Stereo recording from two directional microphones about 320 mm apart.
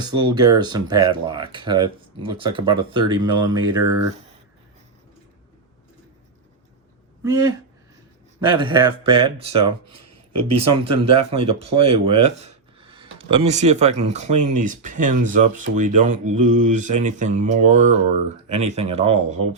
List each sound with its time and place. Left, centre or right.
0.0 s speech: centre
7.3 s speech: centre
10.8 s speech: centre